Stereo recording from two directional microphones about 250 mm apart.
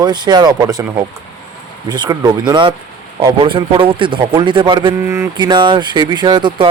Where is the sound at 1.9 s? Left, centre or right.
Centre.